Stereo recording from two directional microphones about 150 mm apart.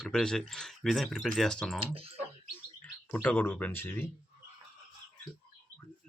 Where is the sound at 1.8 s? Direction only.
40° right (ahead or behind).